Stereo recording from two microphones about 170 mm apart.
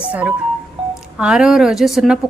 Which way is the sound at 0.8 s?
35° right (ahead or behind).